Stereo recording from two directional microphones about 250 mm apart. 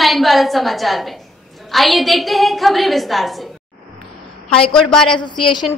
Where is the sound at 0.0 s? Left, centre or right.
Centre.